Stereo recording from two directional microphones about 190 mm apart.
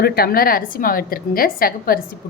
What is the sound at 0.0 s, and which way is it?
A woman's voice, 55° left (ahead or behind).